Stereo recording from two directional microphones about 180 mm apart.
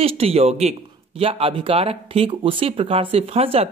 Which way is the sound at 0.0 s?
35° right (ahead or behind).